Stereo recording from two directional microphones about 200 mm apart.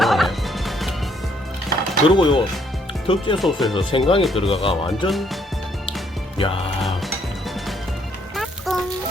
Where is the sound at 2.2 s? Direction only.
25° left (ahead or behind).